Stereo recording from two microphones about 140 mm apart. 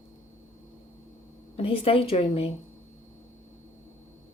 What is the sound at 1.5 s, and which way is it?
Speech, 45° left (ahead or behind).